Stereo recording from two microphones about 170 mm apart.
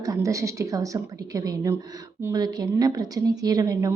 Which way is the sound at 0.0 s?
20° right (ahead or behind).